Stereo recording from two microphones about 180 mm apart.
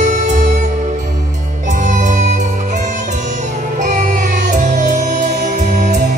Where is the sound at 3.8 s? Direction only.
45° right (ahead or behind).